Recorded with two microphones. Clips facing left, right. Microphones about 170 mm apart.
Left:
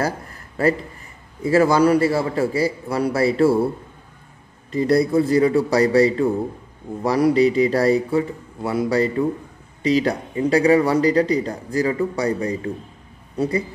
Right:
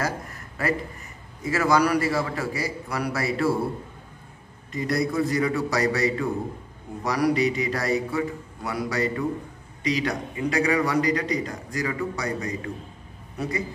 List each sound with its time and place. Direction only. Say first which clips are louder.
0.0 s a sound: left 5 dB; 30° left (ahead or behind)
1.4 s a man's voice: left 6 dB; 30° left (ahead or behind)
4.7 s a man's voice: left 8 dB; 30° left (ahead or behind)